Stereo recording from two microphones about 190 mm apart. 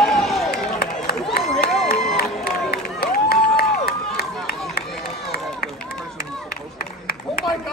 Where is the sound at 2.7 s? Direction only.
55° left (ahead or behind).